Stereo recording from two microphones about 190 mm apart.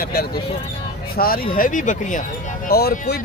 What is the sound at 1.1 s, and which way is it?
Speech, 50° left (ahead or behind).